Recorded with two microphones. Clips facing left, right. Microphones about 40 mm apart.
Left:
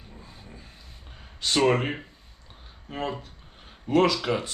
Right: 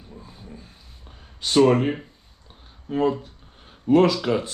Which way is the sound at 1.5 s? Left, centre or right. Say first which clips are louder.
Right 5 dB; centre.